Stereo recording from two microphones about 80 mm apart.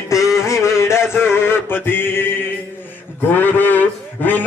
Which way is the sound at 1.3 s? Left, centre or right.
Left.